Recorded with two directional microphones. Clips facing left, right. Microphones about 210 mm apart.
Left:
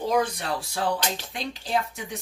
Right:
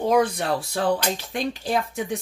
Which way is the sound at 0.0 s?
55° right (ahead or behind).